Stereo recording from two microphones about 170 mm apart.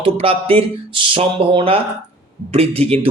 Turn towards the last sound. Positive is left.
turn(degrees=-35)  # may be behind; listen again after turning